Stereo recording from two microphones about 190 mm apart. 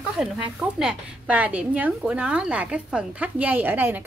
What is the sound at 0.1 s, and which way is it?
A woman's voice, 5° right (ahead or behind).